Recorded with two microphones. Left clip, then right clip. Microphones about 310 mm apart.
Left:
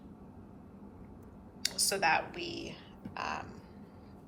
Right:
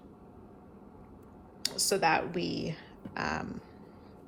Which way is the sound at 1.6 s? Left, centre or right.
Centre.